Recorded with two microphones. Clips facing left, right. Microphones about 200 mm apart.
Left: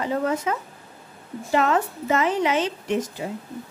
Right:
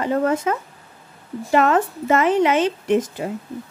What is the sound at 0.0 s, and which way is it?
A woman's voice, 55° right (ahead or behind).